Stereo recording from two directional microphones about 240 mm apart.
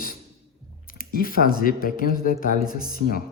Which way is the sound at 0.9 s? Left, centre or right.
Left.